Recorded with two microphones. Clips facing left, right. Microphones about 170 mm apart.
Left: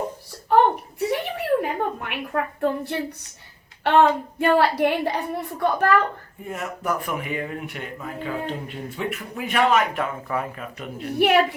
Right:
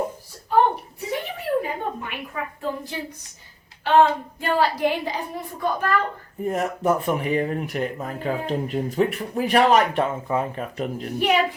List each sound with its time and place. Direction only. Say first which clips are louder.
0.5 s a sound: left 2 dB; 70° left (ahead or behind)
3.8 s a woman's voice: even; 65° left (ahead or behind)
6.5 s speech: right 5 dB; 35° right (ahead or behind)
11.2 s a woman's voice: left 3 dB; 75° left (ahead or behind)